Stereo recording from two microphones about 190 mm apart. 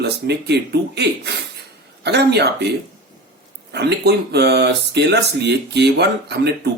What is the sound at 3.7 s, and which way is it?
Speech, 60° right (ahead or behind).